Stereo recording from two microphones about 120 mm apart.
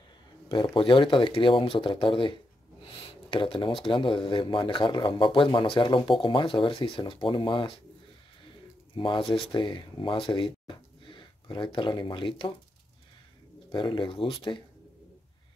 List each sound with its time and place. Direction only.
0.5 s speech: 45° left (ahead or behind)
3.0 s a sound: 45° left (ahead or behind)
3.8 s speech: 45° left (ahead or behind)
8.9 s speech: 45° left (ahead or behind)
13.7 s speech: 40° left (ahead or behind)